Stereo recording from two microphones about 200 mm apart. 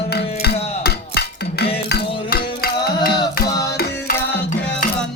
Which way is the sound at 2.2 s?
50° left (ahead or behind).